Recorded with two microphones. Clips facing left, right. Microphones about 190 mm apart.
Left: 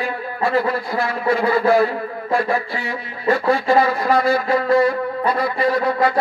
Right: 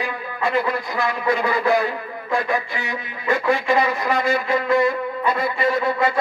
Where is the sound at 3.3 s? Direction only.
35° left (ahead or behind).